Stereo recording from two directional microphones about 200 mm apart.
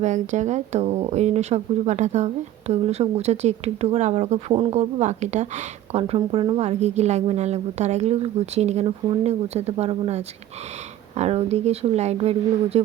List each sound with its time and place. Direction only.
0.0 s speech: 35° right (ahead or behind)